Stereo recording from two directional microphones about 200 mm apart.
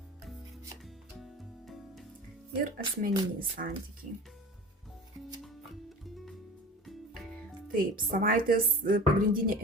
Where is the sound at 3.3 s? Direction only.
45° right (ahead or behind).